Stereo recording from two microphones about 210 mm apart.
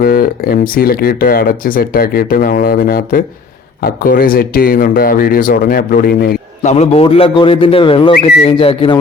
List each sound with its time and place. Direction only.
0.0 s speech: 45° left (ahead or behind); by 9.0 s 25° left (ahead or behind)